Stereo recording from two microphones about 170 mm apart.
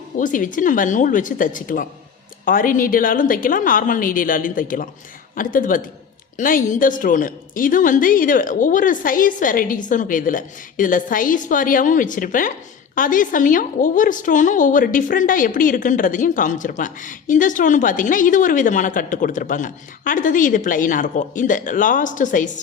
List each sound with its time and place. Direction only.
0.2 s a woman's voice: 50° left (ahead or behind)